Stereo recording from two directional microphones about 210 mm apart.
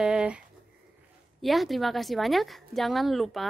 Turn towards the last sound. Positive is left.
turn(degrees=0)  # may be behind; listen again after turning